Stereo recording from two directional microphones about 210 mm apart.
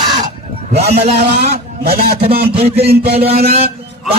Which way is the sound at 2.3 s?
50° right (ahead or behind).